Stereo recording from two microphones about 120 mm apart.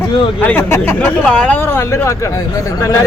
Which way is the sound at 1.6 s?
20° left (ahead or behind).